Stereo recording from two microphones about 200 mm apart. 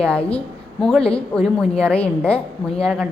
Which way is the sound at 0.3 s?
5° left (ahead or behind).